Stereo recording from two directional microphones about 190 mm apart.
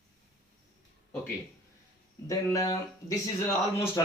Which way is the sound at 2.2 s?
15° left (ahead or behind).